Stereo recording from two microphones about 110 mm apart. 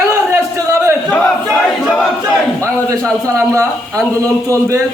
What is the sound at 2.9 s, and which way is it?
A man's voice, 25° right (ahead or behind).